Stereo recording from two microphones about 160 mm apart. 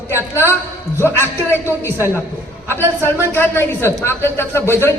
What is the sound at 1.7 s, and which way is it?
Speech, 15° right (ahead or behind).